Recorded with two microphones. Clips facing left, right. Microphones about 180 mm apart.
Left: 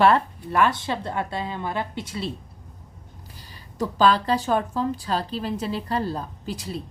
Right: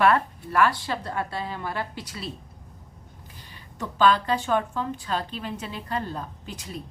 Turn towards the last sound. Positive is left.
turn(degrees=35)  # may be behind; listen again after turning